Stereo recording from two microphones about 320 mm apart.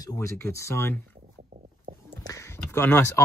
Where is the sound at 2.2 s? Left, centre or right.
Centre.